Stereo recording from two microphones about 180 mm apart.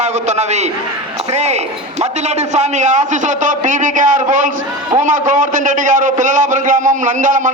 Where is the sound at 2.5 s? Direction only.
40° right (ahead or behind).